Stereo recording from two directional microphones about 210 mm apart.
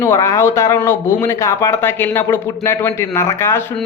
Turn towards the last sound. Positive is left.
turn(degrees=10)  # may be behind; listen again after turning